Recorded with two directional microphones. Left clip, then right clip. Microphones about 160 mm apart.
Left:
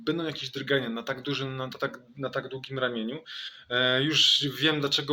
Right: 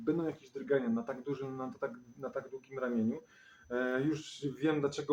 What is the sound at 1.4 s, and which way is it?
Speech, 25° left (ahead or behind).